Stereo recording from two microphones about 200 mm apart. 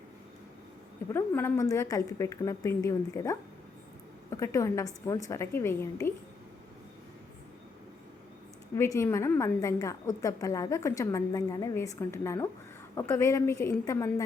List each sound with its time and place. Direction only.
1.1 s a woman's voice: 10° left (ahead or behind)
8.7 s a woman's voice: 15° left (ahead or behind)